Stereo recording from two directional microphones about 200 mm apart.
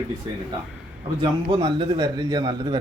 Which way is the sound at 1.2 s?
25° right (ahead or behind).